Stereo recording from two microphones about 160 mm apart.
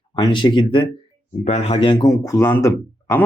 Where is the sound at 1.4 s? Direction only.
45° left (ahead or behind).